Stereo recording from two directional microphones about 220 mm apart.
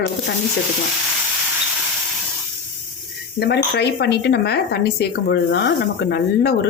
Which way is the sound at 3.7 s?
50° left (ahead or behind).